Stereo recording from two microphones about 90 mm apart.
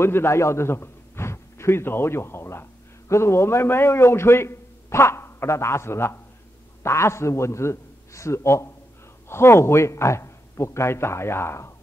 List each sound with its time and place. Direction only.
0.0 s a man's voice: 25° left (ahead or behind)